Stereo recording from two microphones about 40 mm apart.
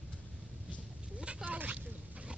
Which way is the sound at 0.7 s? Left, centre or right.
Right.